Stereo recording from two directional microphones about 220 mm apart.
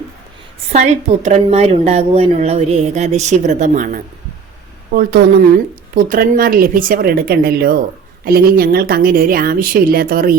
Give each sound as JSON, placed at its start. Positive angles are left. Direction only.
{"t": 0.7, "sound": "a woman's voice", "side_deg": -30}